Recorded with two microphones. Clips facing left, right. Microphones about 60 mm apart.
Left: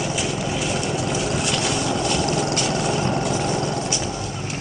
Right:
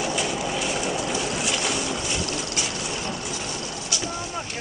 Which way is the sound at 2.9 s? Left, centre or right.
Left.